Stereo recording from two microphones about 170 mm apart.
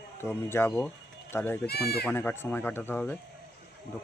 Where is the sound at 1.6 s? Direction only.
70° left (ahead or behind).